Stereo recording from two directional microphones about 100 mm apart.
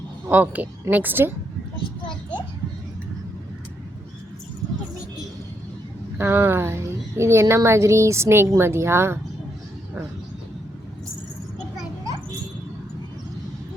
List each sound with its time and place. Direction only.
0.3 s a woman's voice: 15° right (ahead or behind)
6.1 s a woman's voice: 25° right (ahead or behind)